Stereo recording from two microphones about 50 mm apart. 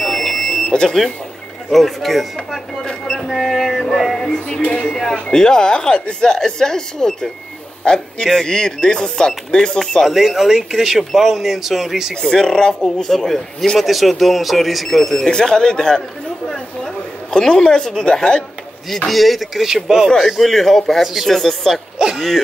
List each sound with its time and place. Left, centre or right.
0.0 s smoke detector: centre
0.7 s speech: centre
4.5 s speech: left
5.3 s a man's voice: centre
10.0 s speech: centre
12.2 s speech: centre
15.2 s a woman's voice: centre
19.0 s speech: centre
20.2 s speech: centre
21.9 s speech: centre